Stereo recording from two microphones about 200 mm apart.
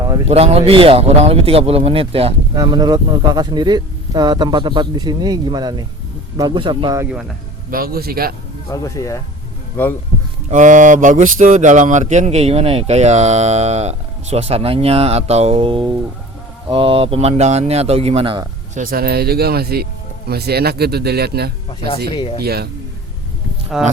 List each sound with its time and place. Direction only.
0.3 s speech: 30° right (ahead or behind)
7.7 s speech: 50° right (ahead or behind)
8.7 s speech: 15° left (ahead or behind)
10.5 s speech: 40° right (ahead or behind)
18.8 s speech: 45° right (ahead or behind)
22.1 s speech: 25° left (ahead or behind)
22.4 s speech: 50° right (ahead or behind)
23.7 s speech: centre (ahead or behind)